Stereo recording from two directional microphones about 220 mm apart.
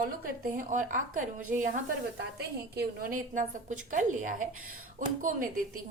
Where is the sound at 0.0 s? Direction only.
40° right (ahead or behind).